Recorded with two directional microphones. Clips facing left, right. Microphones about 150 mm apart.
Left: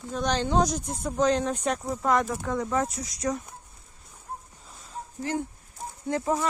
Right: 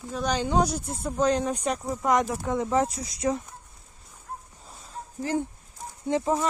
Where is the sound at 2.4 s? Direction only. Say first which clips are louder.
Right 2 dB; 20° right (ahead or behind).